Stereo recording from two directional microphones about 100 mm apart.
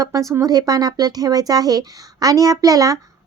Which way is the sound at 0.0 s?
35° right (ahead or behind).